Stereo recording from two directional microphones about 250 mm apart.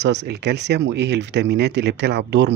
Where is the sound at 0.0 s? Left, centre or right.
Right.